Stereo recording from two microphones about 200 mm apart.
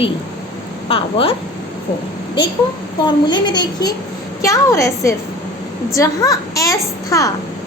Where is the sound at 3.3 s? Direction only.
20° left (ahead or behind).